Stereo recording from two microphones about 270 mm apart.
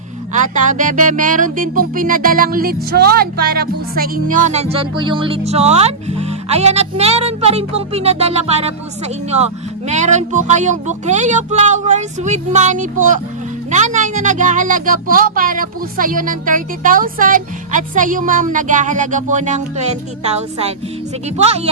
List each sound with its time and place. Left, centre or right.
0.3 s speech: right